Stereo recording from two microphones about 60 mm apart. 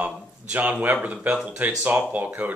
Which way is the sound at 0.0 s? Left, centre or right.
Right.